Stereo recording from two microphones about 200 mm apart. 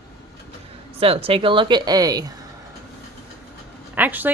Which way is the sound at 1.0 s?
30° right (ahead or behind).